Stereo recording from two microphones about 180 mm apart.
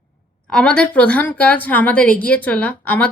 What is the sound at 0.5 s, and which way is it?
A woman's voice, 5° left (ahead or behind).